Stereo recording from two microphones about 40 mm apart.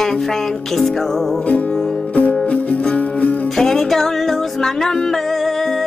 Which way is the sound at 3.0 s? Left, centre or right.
Left.